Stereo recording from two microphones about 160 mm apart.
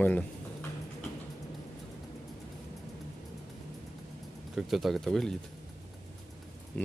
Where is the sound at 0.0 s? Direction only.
10° left (ahead or behind).